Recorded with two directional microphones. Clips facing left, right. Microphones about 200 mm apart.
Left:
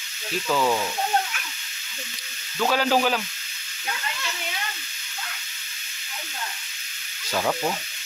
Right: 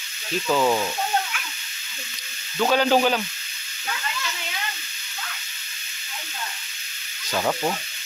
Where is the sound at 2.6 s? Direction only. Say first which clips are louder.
Right 3 dB; centre (ahead or behind).